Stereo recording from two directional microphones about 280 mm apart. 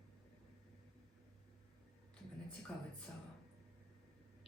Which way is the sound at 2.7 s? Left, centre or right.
Centre.